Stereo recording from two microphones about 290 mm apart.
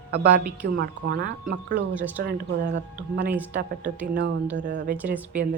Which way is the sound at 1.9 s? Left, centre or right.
Centre.